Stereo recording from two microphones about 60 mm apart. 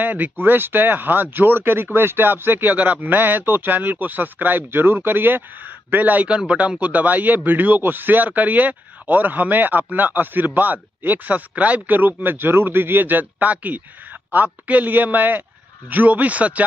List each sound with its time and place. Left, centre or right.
0.0 s a man's voice: right